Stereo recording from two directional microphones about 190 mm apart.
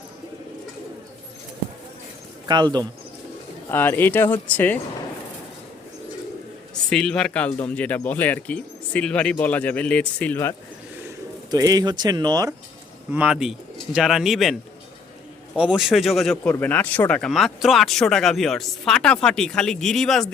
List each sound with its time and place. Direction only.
2.5 s speech: 25° right (ahead or behind)
3.7 s speech: 10° left (ahead or behind)
6.9 s speech: 5° left (ahead or behind)
11.5 s speech: 20° right (ahead or behind)
13.1 s speech: 5° right (ahead or behind)
15.5 s speech: 5° right (ahead or behind)